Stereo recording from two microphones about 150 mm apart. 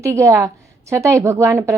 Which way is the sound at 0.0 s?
20° right (ahead or behind).